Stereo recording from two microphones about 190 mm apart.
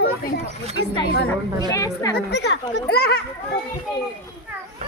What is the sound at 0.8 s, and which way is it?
Speech, 90° left.